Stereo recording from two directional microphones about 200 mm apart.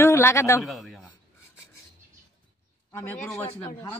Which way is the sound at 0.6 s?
Centre (ahead or behind).